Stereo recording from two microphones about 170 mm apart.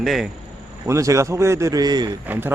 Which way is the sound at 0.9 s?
20° right (ahead or behind).